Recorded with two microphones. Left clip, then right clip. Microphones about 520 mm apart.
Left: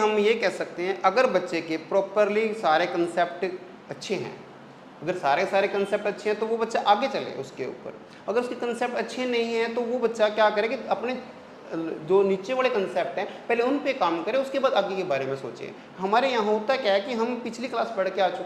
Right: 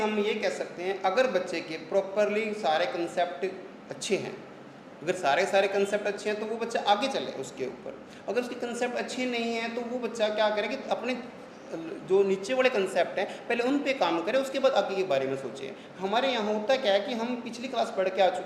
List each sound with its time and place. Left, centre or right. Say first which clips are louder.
0.2 s a woman's voice: left 6 dB; left
5.0 s a woman's voice: left 2 dB; left